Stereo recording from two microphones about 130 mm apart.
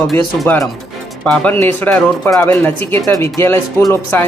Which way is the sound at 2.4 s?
15° left (ahead or behind).